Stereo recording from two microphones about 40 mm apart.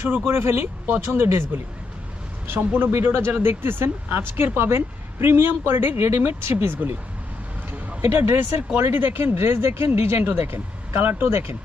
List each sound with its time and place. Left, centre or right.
0.3 s speech: right
1.1 s speech: right
2.5 s speech: right
5.2 s speech: right
8.0 s speech: right
8.3 s speech: right
8.8 s speech: right
10.4 s speech: right